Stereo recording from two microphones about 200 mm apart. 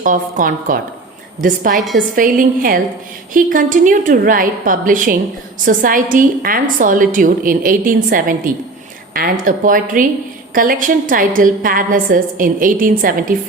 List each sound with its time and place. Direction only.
0.0 s a woman's voice: 40° right (ahead or behind)